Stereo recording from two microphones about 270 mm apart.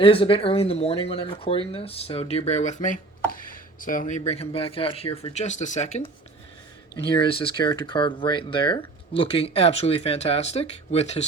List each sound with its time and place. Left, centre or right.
0.0 s speech: centre
7.3 s speech: centre